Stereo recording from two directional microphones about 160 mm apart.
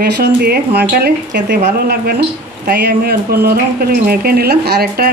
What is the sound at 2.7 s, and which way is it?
Speech, 85° right.